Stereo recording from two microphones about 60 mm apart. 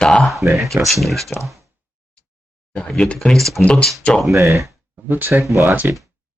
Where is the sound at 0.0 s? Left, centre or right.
Centre.